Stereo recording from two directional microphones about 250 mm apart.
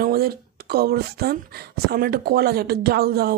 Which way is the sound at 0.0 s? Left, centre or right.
Right.